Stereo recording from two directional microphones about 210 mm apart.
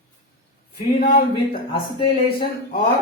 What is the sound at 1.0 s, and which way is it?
Speech, 45° left (ahead or behind).